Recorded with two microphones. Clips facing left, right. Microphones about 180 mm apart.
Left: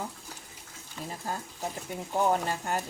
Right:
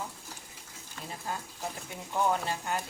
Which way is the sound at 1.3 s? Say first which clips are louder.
Left 1 dB; 40° left (ahead or behind).